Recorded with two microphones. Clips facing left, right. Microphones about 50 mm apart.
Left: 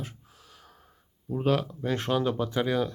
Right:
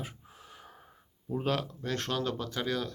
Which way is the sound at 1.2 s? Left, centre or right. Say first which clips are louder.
Left 5 dB; centre.